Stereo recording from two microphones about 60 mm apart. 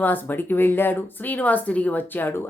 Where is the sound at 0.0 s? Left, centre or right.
Left.